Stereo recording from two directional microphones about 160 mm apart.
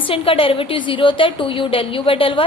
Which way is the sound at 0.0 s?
35° left (ahead or behind).